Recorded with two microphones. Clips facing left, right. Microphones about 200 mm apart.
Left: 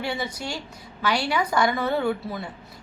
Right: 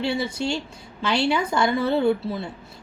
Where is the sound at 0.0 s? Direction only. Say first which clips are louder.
Right 5 dB; 30° right (ahead or behind).